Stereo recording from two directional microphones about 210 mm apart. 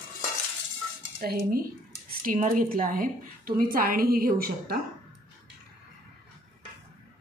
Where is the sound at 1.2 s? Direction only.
45° right (ahead or behind).